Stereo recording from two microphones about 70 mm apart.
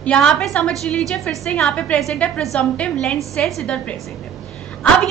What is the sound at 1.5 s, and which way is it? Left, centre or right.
A woman's voice, centre.